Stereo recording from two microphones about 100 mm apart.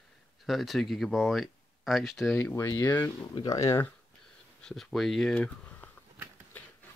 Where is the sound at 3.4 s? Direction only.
35° left (ahead or behind).